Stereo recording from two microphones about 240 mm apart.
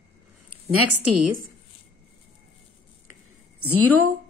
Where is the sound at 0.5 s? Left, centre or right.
Right.